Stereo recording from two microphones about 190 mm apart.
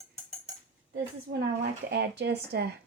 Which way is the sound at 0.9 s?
60° right (ahead or behind).